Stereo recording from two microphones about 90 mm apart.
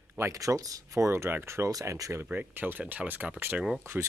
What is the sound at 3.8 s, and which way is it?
Speech, 30° right (ahead or behind).